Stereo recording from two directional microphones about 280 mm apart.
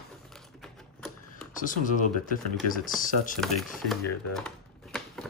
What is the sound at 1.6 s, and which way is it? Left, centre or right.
Speech, left.